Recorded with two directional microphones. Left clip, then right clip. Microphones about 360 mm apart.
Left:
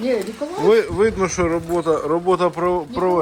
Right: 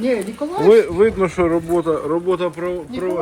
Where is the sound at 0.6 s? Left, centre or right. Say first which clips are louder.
Right 3 dB; centre.